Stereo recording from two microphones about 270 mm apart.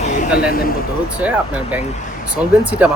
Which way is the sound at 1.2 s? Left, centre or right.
Centre.